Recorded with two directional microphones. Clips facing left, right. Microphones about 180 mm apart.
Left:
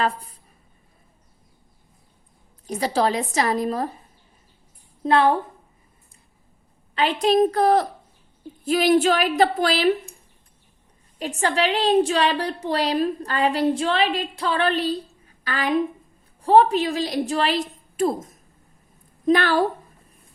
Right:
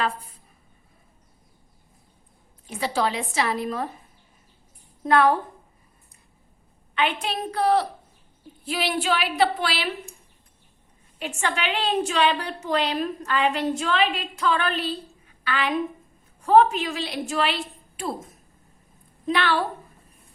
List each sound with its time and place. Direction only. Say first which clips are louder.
2.6 s a woman's voice: left 4 dB; 40° left (ahead or behind)
5.0 s a woman's voice: left 1 dB; 25° left (ahead or behind)
6.9 s a woman's voice: left 7 dB; 35° left (ahead or behind)
11.2 s a woman's voice: left 5 dB; 35° left (ahead or behind)